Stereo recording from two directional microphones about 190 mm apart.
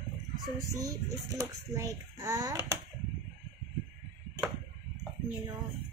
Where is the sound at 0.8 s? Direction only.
15° right (ahead or behind).